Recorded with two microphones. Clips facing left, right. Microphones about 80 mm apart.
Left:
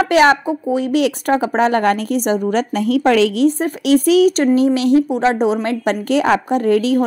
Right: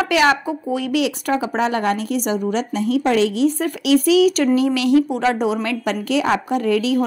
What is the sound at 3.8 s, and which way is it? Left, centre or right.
Speech, left.